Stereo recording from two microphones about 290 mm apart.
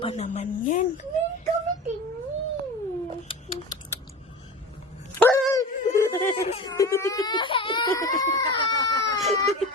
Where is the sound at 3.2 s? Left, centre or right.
Centre.